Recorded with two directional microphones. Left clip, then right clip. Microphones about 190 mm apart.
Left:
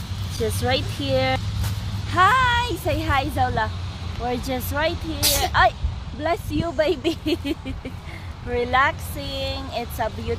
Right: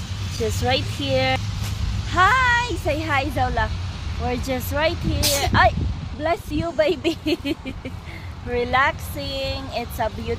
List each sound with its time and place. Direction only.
0.6 s a woman's voice: centre (ahead or behind); by 10.3 s 25° right (ahead or behind)